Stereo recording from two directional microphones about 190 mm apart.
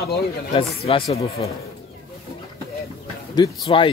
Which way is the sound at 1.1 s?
35° left (ahead or behind).